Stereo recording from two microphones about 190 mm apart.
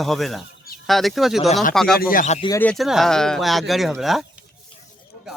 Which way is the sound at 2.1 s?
40° left (ahead or behind).